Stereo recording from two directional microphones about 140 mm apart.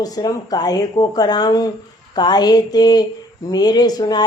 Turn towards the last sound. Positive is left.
turn(degrees=30)  # may be behind; listen again after turning